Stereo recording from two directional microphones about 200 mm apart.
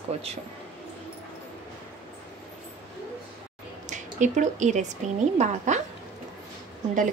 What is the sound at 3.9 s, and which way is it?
A woman's voice, 40° right (ahead or behind).